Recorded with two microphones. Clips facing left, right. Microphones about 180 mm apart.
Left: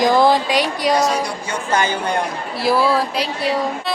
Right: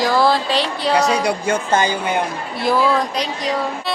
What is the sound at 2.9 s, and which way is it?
Speech, 5° left (ahead or behind).